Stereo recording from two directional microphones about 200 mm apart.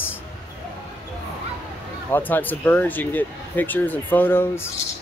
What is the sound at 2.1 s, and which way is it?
Speech, 10° left (ahead or behind).